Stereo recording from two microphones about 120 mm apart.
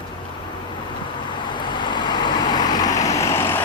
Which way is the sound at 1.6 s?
40° left (ahead or behind).